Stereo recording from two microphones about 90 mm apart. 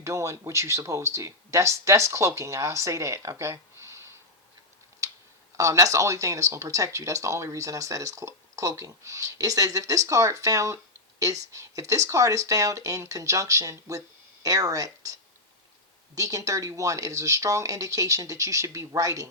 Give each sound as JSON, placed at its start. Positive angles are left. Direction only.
{"t": 0.0, "sound": "speech", "side_deg": -30}
{"t": 5.5, "sound": "speech", "side_deg": -40}